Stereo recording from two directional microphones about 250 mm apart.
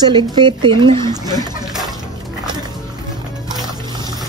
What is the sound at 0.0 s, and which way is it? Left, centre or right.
Speech, centre.